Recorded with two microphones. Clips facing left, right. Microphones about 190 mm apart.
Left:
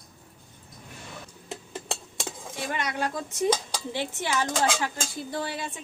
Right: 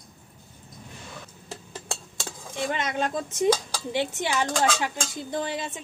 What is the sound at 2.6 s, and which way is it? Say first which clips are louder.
Speech: right 3 dB; 20° right (ahead or behind).